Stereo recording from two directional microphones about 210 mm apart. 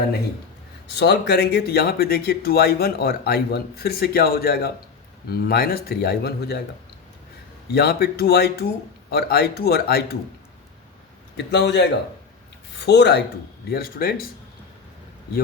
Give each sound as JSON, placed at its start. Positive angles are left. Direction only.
{"t": 0.9, "sound": "speech", "side_deg": 50}
{"t": 7.7, "sound": "speech", "side_deg": 50}
{"t": 11.3, "sound": "a man's voice", "side_deg": 55}